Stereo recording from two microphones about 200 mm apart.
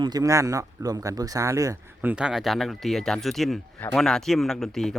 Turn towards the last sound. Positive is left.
turn(degrees=0)  # may be behind; listen again after turning